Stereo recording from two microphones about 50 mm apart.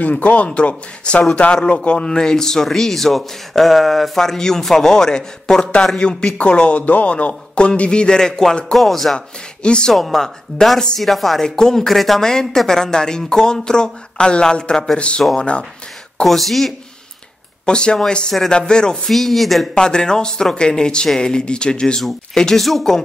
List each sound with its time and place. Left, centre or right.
0.0 s a man's voice: left; by 9.2 s centre
9.6 s speech: centre
9.9 s speech: centre
11.4 s a man's voice: centre
16.3 s speech: centre
17.6 s speech: centre
19.0 s speech: centre
19.7 s speech: centre
22.7 s speech: centre